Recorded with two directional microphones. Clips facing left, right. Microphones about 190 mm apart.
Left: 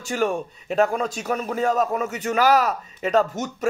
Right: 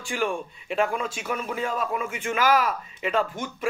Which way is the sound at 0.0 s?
40° left (ahead or behind).